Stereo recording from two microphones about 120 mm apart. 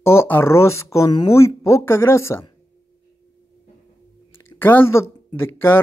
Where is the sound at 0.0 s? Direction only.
20° left (ahead or behind).